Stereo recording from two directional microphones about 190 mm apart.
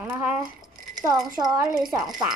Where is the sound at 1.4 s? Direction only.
20° right (ahead or behind).